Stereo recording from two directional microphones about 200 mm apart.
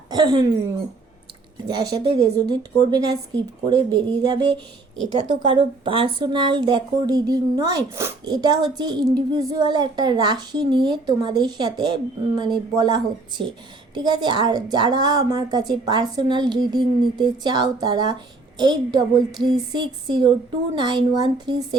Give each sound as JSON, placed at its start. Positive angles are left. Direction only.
{"t": 0.1, "sound": "speech", "side_deg": -20}
{"t": 1.6, "sound": "speech", "side_deg": -20}
{"t": 5.1, "sound": "a woman's voice", "side_deg": -40}
{"t": 5.5, "sound": "speech", "side_deg": -25}